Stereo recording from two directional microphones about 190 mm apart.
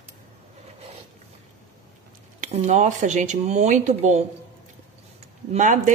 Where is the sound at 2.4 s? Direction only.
40° right (ahead or behind).